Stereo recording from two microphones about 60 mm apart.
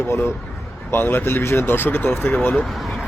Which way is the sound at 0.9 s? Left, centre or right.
Left.